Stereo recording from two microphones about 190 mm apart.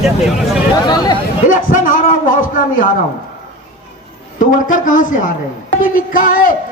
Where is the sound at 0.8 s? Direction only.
20° left (ahead or behind).